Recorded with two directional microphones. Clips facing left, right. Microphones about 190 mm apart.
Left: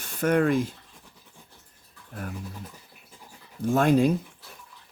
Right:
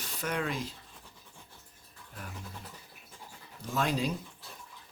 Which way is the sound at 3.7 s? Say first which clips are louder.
Left 11 dB; 50° left (ahead or behind).